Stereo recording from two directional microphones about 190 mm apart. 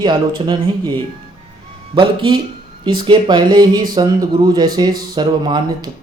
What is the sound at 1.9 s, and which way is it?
Speech, 25° right (ahead or behind).